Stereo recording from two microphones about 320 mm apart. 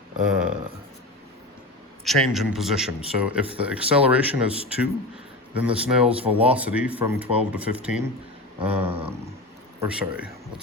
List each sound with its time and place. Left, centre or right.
0.3 s a man's voice: centre
2.0 s a man's voice: centre
6.1 s speech: centre
6.5 s a man's voice: centre
8.9 s a sound: centre
9.8 s a man's voice: centre